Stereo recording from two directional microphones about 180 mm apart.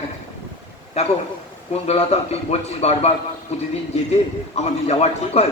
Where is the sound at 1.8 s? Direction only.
35° left (ahead or behind).